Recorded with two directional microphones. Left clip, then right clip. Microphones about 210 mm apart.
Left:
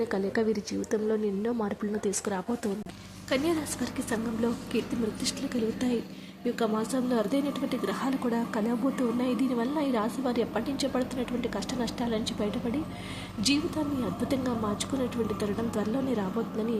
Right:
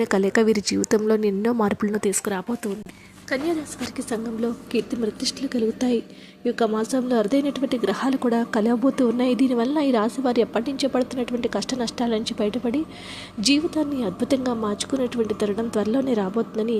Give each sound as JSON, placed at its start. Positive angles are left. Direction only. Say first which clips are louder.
{"t": 0.0, "sound": "a woman's voice", "louder": "right 9 dB", "side_deg": -25}